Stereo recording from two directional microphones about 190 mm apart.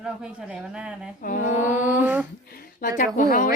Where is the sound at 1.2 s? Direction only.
45° left (ahead or behind).